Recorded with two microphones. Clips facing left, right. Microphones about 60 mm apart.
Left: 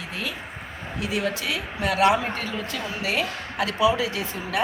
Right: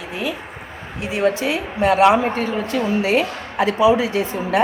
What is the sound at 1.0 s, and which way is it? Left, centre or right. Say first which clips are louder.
A woman's voice: right 8 dB; right.